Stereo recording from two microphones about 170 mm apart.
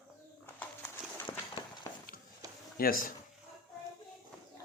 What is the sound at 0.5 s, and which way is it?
Horse, 10° left (ahead or behind).